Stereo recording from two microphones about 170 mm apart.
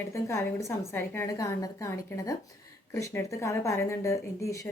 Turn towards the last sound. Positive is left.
turn(degrees=20)  # may be behind; listen again after turning